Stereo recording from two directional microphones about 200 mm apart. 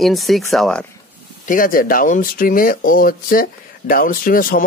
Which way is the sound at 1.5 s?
45° left (ahead or behind).